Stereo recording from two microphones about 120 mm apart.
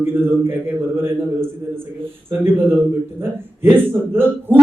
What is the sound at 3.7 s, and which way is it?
Speech, 20° right (ahead or behind).